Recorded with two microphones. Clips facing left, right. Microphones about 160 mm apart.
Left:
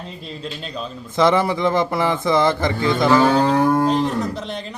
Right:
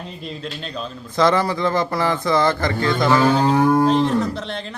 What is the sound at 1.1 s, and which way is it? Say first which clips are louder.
Speech: left 1 dB; 20° left (ahead or behind).